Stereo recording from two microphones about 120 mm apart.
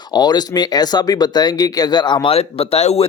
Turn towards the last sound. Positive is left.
turn(degrees=60)  # may be behind; listen again after turning